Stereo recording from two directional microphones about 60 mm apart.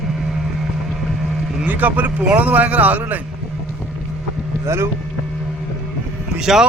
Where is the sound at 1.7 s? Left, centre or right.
Right.